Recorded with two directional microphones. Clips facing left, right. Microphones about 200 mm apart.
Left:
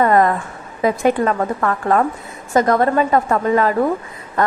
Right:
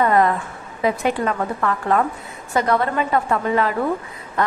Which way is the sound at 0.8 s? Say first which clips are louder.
Left 4 dB; 45° left (ahead or behind).